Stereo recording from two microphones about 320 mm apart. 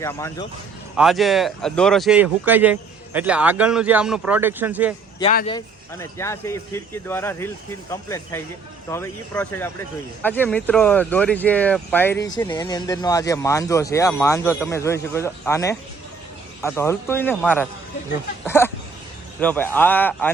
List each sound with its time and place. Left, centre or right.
0.0 s speech: centre
5.2 s speech: left
5.5 s speech: centre